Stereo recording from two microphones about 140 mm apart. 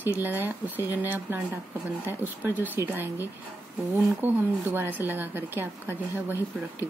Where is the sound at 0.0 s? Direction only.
15° right (ahead or behind).